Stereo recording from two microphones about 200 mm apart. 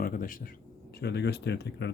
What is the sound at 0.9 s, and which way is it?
Speech, 55° left (ahead or behind).